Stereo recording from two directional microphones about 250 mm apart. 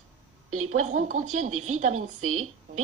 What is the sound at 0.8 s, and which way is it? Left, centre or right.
Speech, right.